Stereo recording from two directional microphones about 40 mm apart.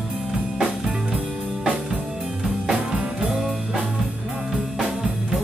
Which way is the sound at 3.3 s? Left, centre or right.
Centre.